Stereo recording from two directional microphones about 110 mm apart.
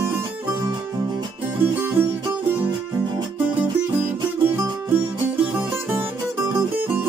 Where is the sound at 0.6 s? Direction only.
40° right (ahead or behind).